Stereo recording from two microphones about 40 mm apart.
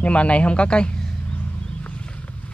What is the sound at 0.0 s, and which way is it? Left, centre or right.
Speech, left.